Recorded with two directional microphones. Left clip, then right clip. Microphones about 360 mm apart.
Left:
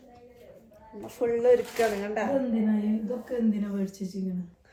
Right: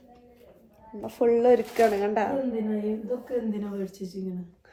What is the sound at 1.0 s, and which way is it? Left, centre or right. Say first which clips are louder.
Speech: right 3 dB; right.